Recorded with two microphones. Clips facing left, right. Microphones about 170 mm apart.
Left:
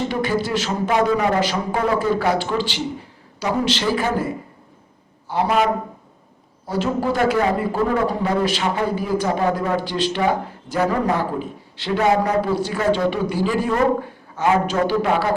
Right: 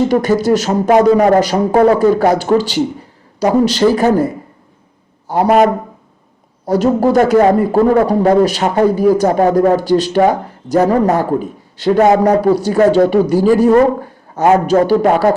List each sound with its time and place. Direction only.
0.0 s speech: 40° right (ahead or behind)
5.3 s a man's voice: 45° right (ahead or behind)